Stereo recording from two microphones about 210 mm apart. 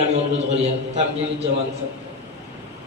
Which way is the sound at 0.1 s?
30° right (ahead or behind).